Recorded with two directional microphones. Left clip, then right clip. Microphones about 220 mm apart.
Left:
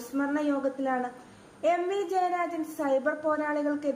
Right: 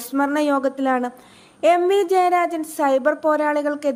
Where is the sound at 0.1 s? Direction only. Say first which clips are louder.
Right 10 dB; 40° right (ahead or behind).